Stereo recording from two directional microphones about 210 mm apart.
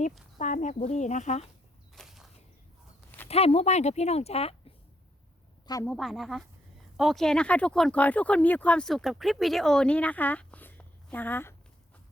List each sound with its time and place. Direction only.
0.3 s speech: 35° left (ahead or behind)
2.0 s a sound: centre (ahead or behind)
3.2 s speech: 30° left (ahead or behind)
5.8 s speech: centre (ahead or behind)